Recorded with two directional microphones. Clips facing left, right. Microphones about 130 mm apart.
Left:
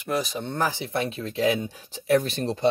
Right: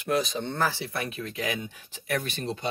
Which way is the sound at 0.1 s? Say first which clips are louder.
Even; centre (ahead or behind).